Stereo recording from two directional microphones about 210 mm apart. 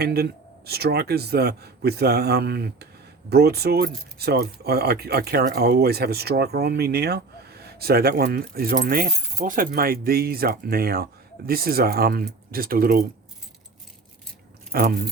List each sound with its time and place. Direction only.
0.0 s speech: 50° right (ahead or behind)
14.7 s speech: 45° right (ahead or behind)